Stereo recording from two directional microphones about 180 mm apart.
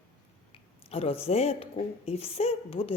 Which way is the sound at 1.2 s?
35° left (ahead or behind).